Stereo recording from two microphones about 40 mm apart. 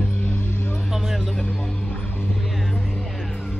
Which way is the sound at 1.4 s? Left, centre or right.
Left.